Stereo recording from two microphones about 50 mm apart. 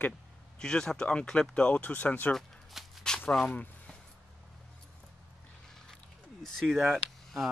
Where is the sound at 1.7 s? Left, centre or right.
Left.